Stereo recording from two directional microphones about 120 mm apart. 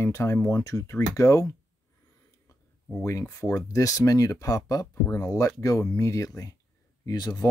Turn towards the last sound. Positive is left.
turn(degrees=30)  # may be behind; listen again after turning